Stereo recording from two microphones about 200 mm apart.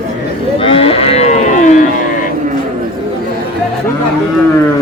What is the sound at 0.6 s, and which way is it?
Cattle, 30° left (ahead or behind).